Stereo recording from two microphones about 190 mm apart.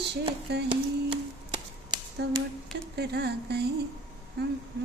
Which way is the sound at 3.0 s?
60° right (ahead or behind).